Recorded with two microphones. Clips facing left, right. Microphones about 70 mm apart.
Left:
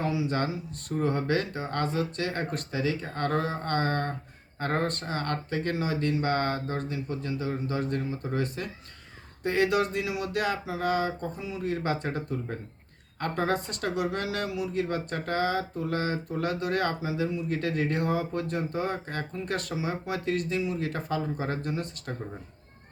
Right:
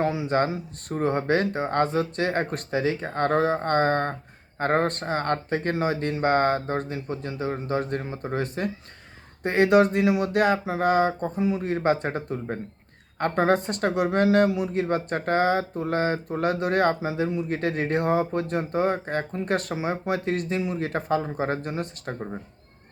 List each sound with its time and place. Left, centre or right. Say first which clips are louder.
0.0 s speech: right 5 dB; right